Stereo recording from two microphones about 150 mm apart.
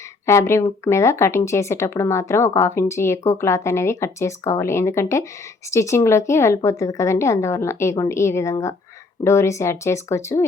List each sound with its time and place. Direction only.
0.3 s speech: 20° left (ahead or behind)